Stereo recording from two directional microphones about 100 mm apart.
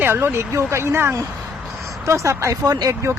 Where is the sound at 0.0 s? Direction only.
20° right (ahead or behind).